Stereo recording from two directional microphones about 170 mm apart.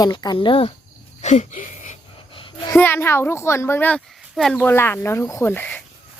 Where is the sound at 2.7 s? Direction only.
10° left (ahead or behind).